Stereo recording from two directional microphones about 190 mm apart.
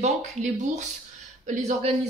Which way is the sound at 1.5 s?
35° right (ahead or behind).